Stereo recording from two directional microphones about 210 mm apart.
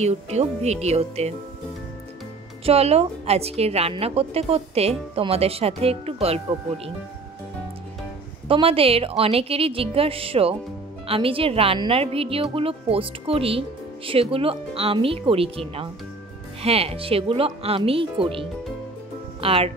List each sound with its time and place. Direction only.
0.0 s speech: 30° right (ahead or behind)
2.6 s a woman's voice: 30° right (ahead or behind)
8.5 s a woman's voice: 25° right (ahead or behind)
16.6 s a woman's voice: 30° right (ahead or behind)